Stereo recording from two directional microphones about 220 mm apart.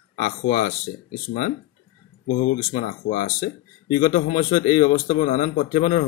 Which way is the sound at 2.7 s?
35° left (ahead or behind).